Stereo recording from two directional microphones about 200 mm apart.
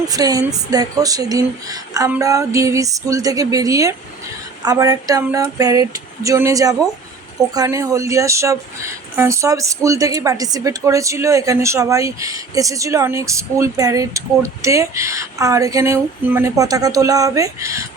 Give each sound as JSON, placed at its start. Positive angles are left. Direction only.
{"t": 0.1, "sound": "speech", "side_deg": -20}